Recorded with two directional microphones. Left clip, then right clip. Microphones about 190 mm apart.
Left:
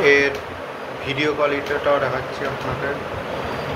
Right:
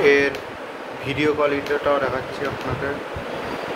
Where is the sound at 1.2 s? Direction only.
45° right (ahead or behind).